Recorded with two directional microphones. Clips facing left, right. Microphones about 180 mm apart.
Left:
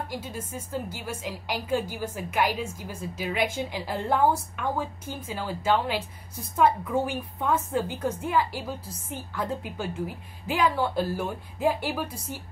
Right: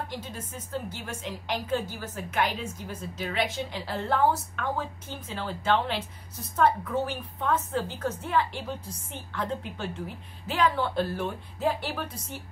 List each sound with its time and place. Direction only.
0.1 s a woman's voice: 10° left (ahead or behind)